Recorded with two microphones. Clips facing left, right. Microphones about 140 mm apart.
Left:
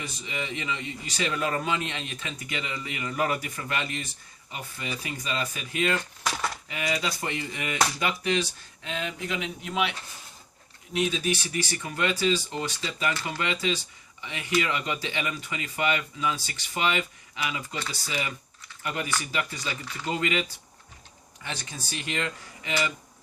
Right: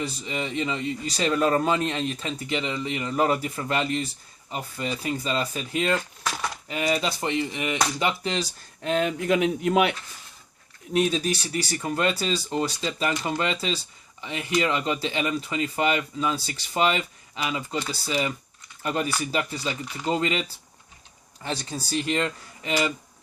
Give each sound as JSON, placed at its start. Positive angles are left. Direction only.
{"t": 0.0, "sound": "speech", "side_deg": -35}
{"t": 8.8, "sound": "speech", "side_deg": -50}
{"t": 10.9, "sound": "speech", "side_deg": -40}
{"t": 21.4, "sound": "speech", "side_deg": -35}